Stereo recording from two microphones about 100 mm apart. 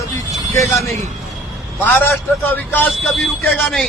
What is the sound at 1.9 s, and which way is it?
A man's voice, 20° left (ahead or behind).